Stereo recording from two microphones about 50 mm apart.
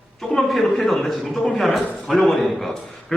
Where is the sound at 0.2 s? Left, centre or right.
Centre.